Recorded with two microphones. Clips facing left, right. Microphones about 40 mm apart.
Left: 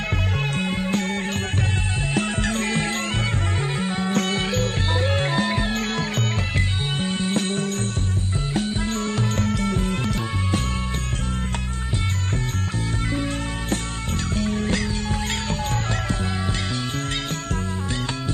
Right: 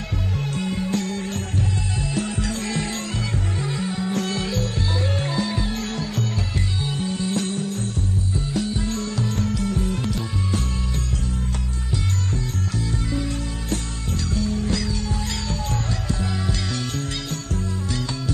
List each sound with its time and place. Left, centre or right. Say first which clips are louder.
0.4 s music: right 1 dB; left
4.0 s music: left 3 dB; left
7.6 s music: left 1 dB; left
8.5 s music: left 1 dB; left
13.1 s music: left 1 dB; left